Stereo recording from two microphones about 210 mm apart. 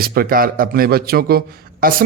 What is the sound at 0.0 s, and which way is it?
Speech, 45° right (ahead or behind).